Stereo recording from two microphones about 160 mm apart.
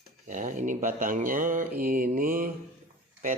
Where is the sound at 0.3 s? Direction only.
50° right (ahead or behind).